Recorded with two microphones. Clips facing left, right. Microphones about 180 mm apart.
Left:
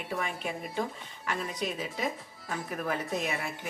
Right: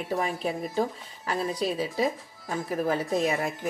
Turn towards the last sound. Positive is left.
turn(degrees=-35)  # may be behind; listen again after turning